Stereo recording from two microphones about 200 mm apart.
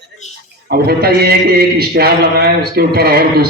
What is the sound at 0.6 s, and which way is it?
A man's voice, 50° right (ahead or behind).